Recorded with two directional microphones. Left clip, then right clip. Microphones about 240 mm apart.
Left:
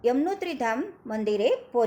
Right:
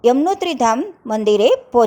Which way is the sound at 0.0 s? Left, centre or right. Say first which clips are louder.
Right 10 dB; right.